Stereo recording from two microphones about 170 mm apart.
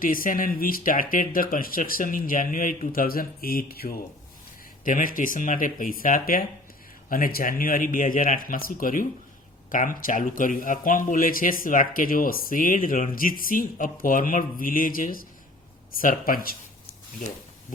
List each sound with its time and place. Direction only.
0.0 s speech: 55° left (ahead or behind)
4.9 s speech: 50° left (ahead or behind)